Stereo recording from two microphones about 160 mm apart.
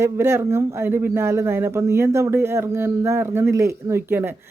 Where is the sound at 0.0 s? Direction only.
15° right (ahead or behind).